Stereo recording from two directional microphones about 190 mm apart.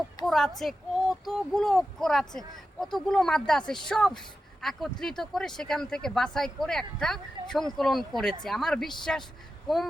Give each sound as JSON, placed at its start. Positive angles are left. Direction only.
{"t": 0.3, "sound": "speech", "side_deg": 0}